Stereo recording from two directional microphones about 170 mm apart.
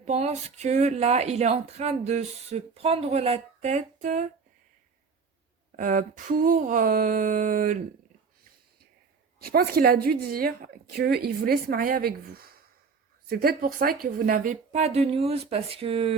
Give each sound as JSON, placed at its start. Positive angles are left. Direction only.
{"t": 0.0, "sound": "speech", "side_deg": -40}
{"t": 5.7, "sound": "a sound", "side_deg": -50}
{"t": 9.4, "sound": "speech", "side_deg": -60}